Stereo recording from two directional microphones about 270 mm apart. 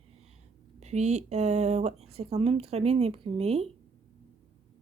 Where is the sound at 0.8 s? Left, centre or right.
Right.